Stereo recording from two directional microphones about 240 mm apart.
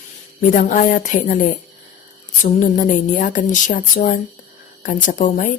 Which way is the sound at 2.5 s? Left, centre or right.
Left.